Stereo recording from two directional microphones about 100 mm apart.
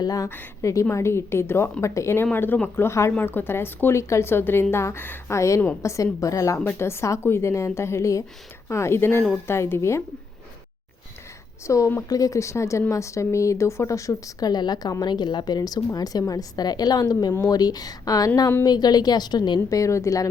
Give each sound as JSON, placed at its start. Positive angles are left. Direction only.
{"t": 0.0, "sound": "a woman's voice", "side_deg": 35}
{"t": 11.6, "sound": "a woman's voice", "side_deg": 30}
{"t": 19.7, "sound": "speech", "side_deg": 30}